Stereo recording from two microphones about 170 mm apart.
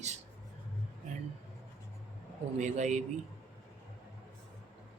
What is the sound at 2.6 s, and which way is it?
Speech, 45° right (ahead or behind).